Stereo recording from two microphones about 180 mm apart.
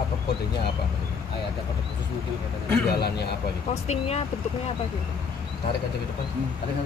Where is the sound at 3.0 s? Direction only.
65° left (ahead or behind).